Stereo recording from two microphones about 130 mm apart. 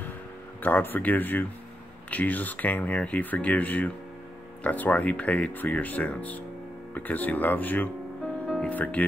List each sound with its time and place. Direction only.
0.6 s speech: 15° left (ahead or behind)